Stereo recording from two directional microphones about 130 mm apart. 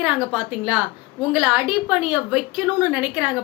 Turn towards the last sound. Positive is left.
turn(degrees=-5)  # may be behind; listen again after turning